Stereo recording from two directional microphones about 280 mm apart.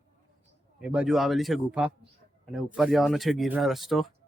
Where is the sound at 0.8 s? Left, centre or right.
Centre.